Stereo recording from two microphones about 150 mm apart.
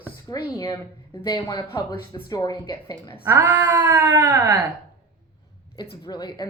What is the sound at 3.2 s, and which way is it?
Speech, 15° right (ahead or behind).